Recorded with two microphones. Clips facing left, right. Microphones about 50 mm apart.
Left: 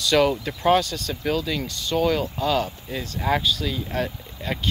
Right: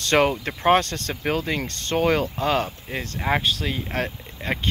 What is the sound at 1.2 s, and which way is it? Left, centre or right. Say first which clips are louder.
Speech: even; right.